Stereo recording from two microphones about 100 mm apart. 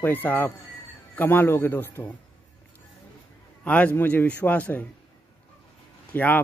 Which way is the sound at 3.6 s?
15° left (ahead or behind).